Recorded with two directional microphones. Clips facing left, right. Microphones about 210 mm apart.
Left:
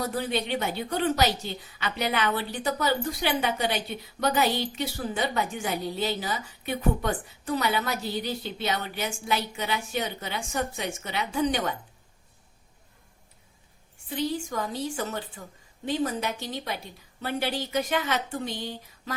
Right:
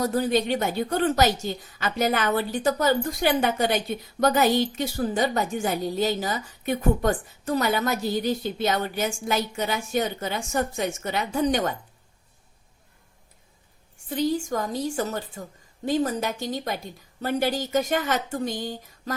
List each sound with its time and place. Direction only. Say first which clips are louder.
0.0 s a woman's voice: right 6 dB; 40° right (ahead or behind)
14.1 s a woman's voice: right 5 dB; 45° right (ahead or behind)